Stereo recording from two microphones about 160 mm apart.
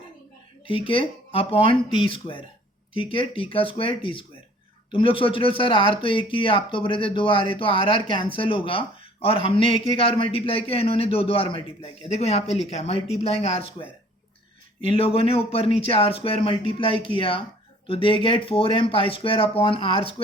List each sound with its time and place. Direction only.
0.7 s a man's voice: 35° left (ahead or behind)